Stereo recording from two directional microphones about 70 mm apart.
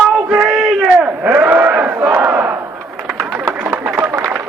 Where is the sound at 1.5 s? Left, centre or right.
Right.